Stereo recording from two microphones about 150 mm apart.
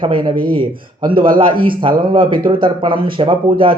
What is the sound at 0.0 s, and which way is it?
Speech, 35° right (ahead or behind).